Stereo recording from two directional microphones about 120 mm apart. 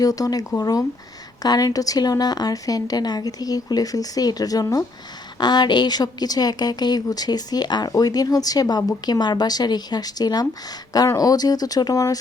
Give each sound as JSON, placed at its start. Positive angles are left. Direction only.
{"t": 0.0, "sound": "a woman's voice", "side_deg": 30}